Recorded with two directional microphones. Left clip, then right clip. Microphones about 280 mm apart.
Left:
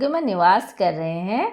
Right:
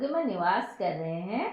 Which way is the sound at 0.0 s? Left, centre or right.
Left.